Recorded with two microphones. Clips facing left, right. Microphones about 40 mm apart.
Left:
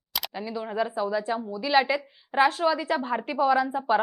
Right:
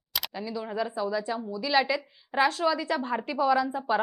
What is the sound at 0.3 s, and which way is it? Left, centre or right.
A woman's voice, centre.